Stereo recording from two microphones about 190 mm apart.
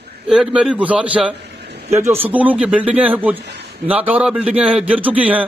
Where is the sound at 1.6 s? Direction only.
60° right (ahead or behind).